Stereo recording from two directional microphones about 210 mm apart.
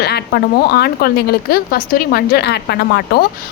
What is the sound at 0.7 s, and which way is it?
A woman's voice, 50° left (ahead or behind).